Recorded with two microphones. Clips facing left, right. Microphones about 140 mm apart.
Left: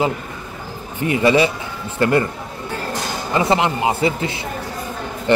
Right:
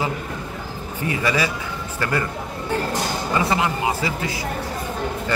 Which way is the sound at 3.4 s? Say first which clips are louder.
Left 5 dB; 25° left (ahead or behind).